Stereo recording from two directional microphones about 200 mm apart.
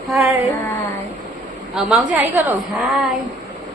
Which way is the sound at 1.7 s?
Centre (ahead or behind).